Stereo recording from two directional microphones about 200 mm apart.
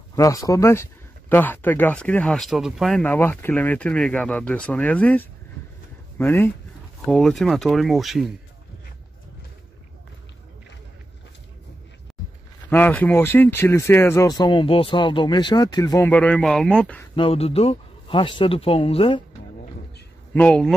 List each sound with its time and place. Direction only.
0.1 s speech: 15° left (ahead or behind); by 8.3 s centre (ahead or behind)
12.6 s speech: 10° left (ahead or behind)
17.1 s speech: 30° left (ahead or behind)
20.3 s speech: 5° left (ahead or behind)